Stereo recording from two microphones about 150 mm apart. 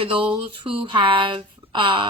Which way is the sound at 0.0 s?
35° right (ahead or behind).